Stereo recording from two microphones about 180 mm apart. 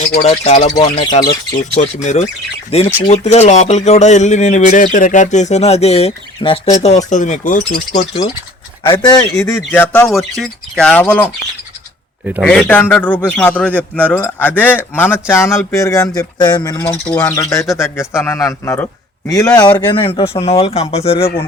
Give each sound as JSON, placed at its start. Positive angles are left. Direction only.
{"t": 0.1, "sound": "speech", "side_deg": 35}
{"t": 1.7, "sound": "speech", "side_deg": 40}
{"t": 8.9, "sound": "speech", "side_deg": 25}
{"t": 12.2, "sound": "a man's voice", "side_deg": -10}
{"t": 12.5, "sound": "speech", "side_deg": 10}
{"t": 19.5, "sound": "speech", "side_deg": 25}